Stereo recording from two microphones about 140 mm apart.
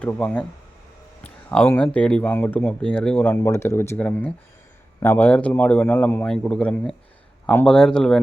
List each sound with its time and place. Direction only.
0.0 s speech: 10° left (ahead or behind)
3.4 s speech: 20° left (ahead or behind); by 8.2 s 5° left (ahead or behind)